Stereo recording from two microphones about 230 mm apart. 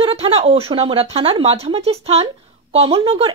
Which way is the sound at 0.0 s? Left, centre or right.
Right.